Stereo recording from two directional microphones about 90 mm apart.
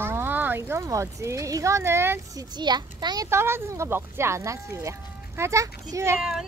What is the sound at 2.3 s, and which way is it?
Speech, 50° right (ahead or behind).